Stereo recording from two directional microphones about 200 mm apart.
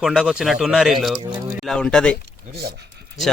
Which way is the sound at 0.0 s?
5° right (ahead or behind).